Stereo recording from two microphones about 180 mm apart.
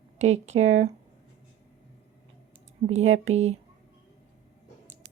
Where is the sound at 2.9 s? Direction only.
90° right.